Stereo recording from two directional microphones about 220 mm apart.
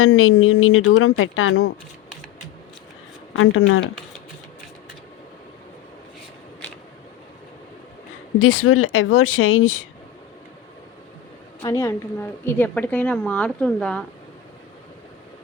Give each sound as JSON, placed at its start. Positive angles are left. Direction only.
{"t": 0.0, "sound": "speech", "side_deg": 70}
{"t": 3.3, "sound": "speech", "side_deg": 65}
{"t": 8.4, "sound": "speech", "side_deg": 70}
{"t": 11.6, "sound": "a woman's voice", "side_deg": 15}